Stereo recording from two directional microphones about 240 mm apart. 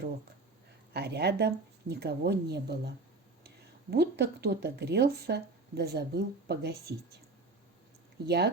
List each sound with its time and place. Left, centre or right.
0.9 s speech: right
3.9 s speech: right
8.2 s speech: right